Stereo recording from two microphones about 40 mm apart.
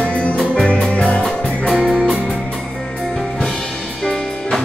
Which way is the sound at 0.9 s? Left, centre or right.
Left.